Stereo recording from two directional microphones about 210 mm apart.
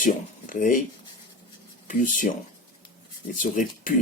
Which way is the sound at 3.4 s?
40° left (ahead or behind).